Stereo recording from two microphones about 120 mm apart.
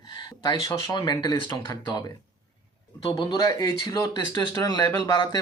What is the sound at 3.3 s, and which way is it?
Speech, 35° left (ahead or behind).